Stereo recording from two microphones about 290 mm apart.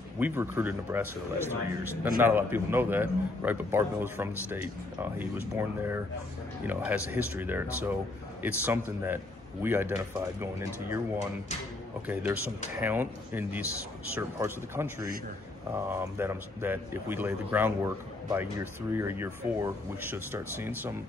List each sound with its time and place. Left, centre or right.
0.2 s a man's voice: centre